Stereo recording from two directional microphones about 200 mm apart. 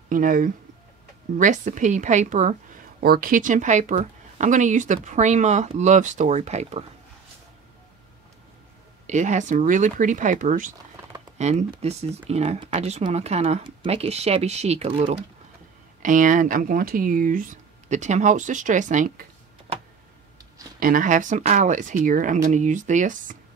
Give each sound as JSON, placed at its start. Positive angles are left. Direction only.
{"t": 0.1, "sound": "speech", "side_deg": -45}
{"t": 3.0, "sound": "speech", "side_deg": -50}
{"t": 9.0, "sound": "speech", "side_deg": -35}
{"t": 20.8, "sound": "speech", "side_deg": -40}